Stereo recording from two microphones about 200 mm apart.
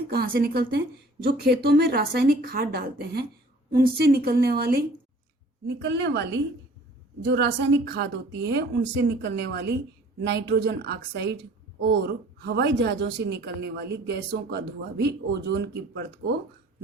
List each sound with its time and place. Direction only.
0.1 s a woman's voice: 50° right (ahead or behind)